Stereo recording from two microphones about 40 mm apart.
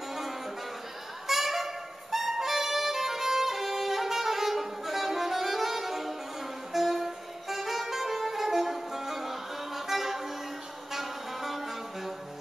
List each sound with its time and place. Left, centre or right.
1.2 s music: centre
10.9 s saxophone: centre